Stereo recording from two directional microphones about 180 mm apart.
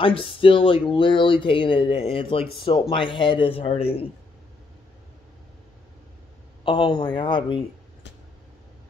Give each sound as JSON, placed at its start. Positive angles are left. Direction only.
{"t": 0.0, "sound": "speech", "side_deg": 30}
{"t": 6.6, "sound": "speech", "side_deg": 25}